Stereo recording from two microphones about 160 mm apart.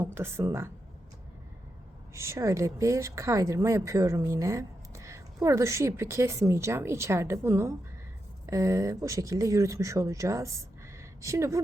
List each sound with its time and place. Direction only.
0.0 s speech: 15° right (ahead or behind)
2.1 s speech: 15° right (ahead or behind)